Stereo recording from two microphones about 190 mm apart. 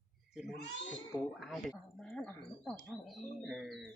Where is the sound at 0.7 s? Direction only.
70° left (ahead or behind).